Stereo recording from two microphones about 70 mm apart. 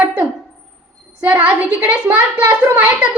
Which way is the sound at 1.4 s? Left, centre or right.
Right.